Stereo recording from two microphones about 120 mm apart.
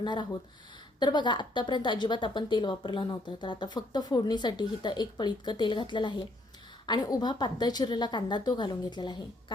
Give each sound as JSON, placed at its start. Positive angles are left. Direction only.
{"t": 0.0, "sound": "a woman's voice", "side_deg": 40}